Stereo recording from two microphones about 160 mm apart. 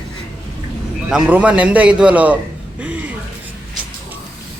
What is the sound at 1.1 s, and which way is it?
Speech, 5° right (ahead or behind).